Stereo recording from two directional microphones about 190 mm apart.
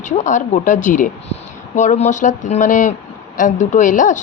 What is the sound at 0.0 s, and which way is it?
Speech, 40° left (ahead or behind).